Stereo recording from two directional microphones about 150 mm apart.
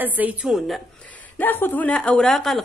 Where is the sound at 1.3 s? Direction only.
15° left (ahead or behind).